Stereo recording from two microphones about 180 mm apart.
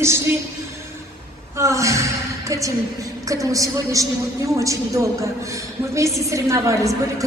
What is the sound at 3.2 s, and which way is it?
A man's voice, 20° right (ahead or behind).